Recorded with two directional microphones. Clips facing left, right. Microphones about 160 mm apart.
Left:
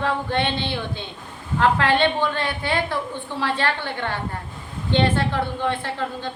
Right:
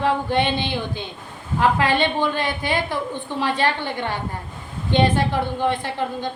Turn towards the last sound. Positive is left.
turn(degrees=-15)  # may be behind; listen again after turning